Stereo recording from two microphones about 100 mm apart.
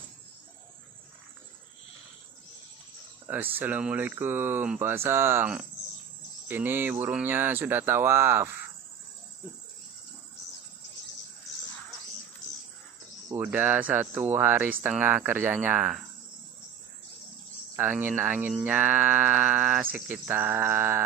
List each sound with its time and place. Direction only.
3.5 s speech: 15° right (ahead or behind)
13.4 s speech: 15° right (ahead or behind)
17.7 s speech: 20° right (ahead or behind)